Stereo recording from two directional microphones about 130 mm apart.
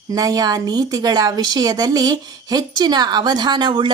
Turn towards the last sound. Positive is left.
turn(degrees=-35)  # may be behind; listen again after turning